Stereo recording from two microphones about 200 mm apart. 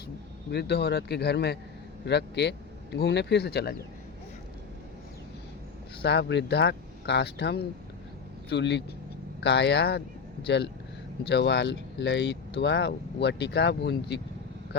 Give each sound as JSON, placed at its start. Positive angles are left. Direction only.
{"t": 0.5, "sound": "speech", "side_deg": 55}
{"t": 6.0, "sound": "speech", "side_deg": 55}